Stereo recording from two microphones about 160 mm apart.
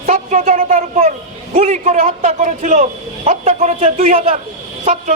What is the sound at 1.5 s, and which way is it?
A man's voice, 50° right (ahead or behind).